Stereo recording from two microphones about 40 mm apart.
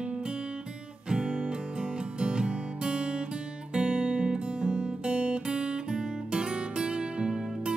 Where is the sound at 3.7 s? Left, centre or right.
Right.